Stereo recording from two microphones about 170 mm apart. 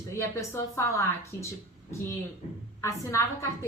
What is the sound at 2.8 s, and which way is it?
Speech, 15° left (ahead or behind).